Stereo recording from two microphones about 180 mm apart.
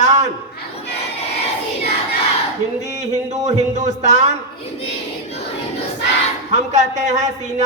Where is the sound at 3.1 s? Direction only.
40° right (ahead or behind).